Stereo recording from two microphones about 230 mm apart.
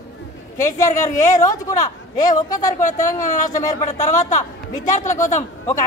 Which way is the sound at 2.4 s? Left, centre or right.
Centre.